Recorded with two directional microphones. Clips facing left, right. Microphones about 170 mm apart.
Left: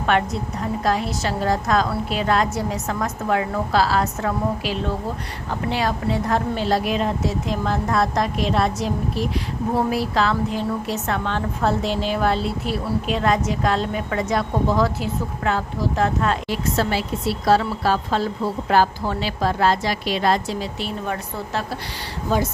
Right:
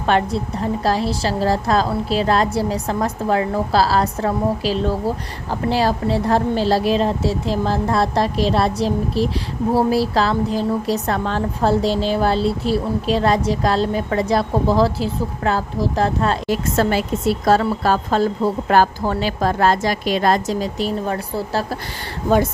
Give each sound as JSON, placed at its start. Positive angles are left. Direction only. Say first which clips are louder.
{"t": 0.0, "sound": "a woman's voice", "louder": "right 3 dB", "side_deg": -30}
{"t": 16.7, "sound": "a woman's voice", "louder": "right 5 dB", "side_deg": -50}